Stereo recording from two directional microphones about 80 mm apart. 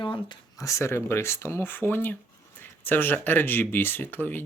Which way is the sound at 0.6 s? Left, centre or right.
Left.